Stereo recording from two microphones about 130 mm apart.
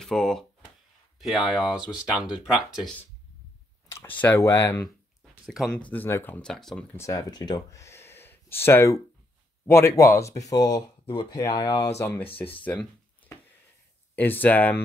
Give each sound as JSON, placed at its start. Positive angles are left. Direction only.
{"t": 0.0, "sound": "speech", "side_deg": 5}
{"t": 3.9, "sound": "speech", "side_deg": 15}
{"t": 5.5, "sound": "speech", "side_deg": 5}
{"t": 6.4, "sound": "speech", "side_deg": 5}
{"t": 7.0, "sound": "speech", "side_deg": 30}
{"t": 14.1, "sound": "speech", "side_deg": 15}